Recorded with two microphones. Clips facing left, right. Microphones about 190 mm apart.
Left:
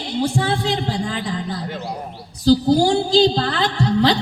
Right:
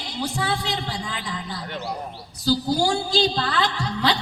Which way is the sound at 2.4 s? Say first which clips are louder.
Left 7 dB; 25° left (ahead or behind).